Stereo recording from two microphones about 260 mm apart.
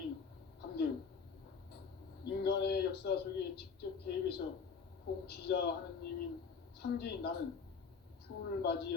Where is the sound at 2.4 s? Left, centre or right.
Left.